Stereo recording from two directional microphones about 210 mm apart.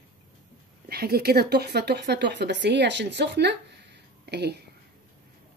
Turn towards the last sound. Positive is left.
turn(degrees=-50)  # may be behind; listen again after turning